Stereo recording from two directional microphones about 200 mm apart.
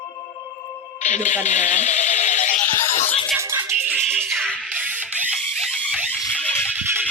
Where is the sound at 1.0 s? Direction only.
35° left (ahead or behind).